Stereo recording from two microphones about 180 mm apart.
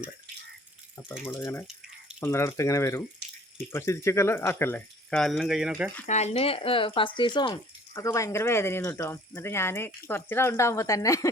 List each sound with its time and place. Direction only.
1.2 s speech: 15° left (ahead or behind)
3.2 s water: 65° right (ahead or behind)
3.6 s speech: 15° left (ahead or behind); by 5.9 s 5° right (ahead or behind)
6.1 s speech: 40° left (ahead or behind); by 11.3 s 20° left (ahead or behind)